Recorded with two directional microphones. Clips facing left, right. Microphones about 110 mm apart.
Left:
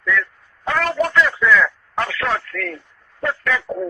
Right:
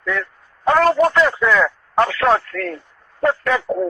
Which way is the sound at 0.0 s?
35° right (ahead or behind).